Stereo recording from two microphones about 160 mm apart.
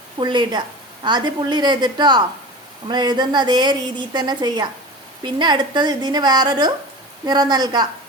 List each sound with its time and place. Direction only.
0.2 s a woman's voice: 30° right (ahead or behind)